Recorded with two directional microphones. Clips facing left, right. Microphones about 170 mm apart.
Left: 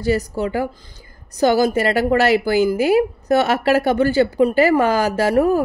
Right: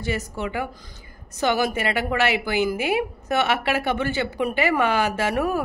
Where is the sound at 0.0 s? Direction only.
35° left (ahead or behind).